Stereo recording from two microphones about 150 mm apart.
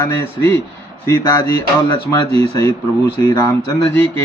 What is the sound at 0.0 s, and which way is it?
A man's voice, 15° left (ahead or behind).